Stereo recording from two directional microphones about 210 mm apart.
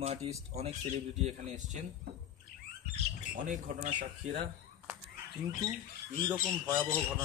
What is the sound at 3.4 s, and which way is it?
Speech, 35° right (ahead or behind).